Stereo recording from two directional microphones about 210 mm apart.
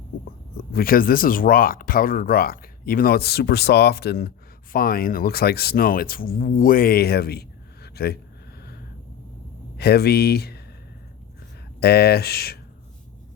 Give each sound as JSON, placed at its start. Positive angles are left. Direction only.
{"t": 0.5, "sound": "speech", "side_deg": 45}
{"t": 9.7, "sound": "speech", "side_deg": 50}
{"t": 11.8, "sound": "speech", "side_deg": 50}